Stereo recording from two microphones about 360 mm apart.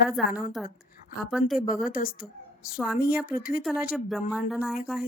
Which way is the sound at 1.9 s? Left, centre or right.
Left.